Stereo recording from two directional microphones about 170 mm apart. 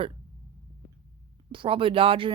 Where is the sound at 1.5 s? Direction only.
30° right (ahead or behind).